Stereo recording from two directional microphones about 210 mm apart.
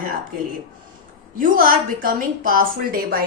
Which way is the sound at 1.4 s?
40° right (ahead or behind).